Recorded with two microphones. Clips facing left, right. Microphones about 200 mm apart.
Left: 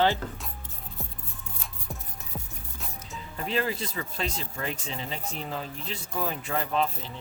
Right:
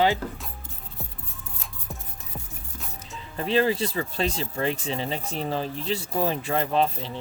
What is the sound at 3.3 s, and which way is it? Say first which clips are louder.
Speech: right 7 dB; 30° right (ahead or behind).